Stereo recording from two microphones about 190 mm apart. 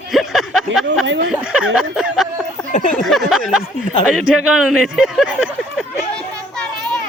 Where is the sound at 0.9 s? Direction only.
70° right (ahead or behind).